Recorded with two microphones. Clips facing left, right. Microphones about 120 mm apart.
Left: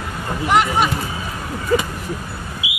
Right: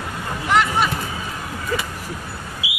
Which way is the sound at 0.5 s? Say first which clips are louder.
Left 2 dB; 15° left (ahead or behind).